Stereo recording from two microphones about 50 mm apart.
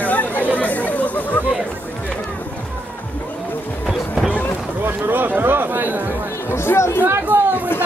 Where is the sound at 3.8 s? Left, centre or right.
Centre.